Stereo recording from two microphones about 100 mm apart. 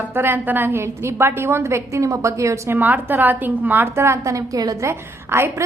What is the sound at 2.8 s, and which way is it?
A woman's voice, 15° right (ahead or behind).